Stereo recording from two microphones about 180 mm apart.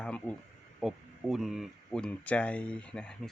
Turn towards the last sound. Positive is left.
turn(degrees=5)  # may be behind; listen again after turning